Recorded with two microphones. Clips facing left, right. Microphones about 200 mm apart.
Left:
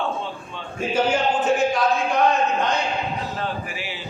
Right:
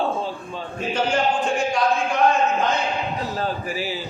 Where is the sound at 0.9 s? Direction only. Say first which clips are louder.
Left 1 dB; 5° left (ahead or behind).